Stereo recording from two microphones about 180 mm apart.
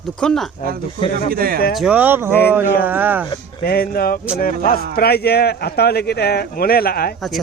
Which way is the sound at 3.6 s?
55° left (ahead or behind).